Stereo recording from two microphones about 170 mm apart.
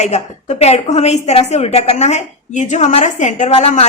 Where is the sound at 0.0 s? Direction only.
45° left (ahead or behind).